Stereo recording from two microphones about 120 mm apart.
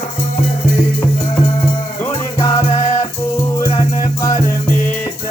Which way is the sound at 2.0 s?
25° left (ahead or behind).